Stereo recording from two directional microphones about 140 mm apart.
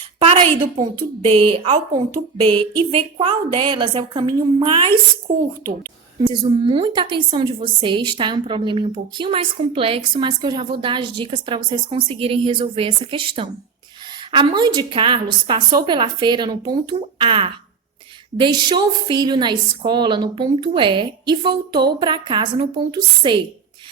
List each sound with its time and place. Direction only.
0.2 s a woman's voice: 40° right (ahead or behind)
6.1 s a woman's voice: 35° right (ahead or behind)